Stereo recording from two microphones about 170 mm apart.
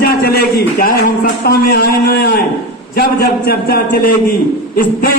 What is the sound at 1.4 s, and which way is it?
A man's voice, 65° left (ahead or behind).